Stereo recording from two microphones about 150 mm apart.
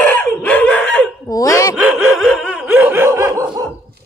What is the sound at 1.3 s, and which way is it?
Dog, 20° left (ahead or behind).